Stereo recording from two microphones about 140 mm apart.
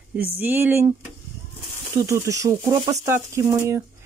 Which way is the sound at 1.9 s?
20° right (ahead or behind).